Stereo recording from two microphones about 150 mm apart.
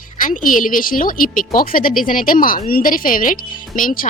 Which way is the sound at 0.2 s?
60° left (ahead or behind).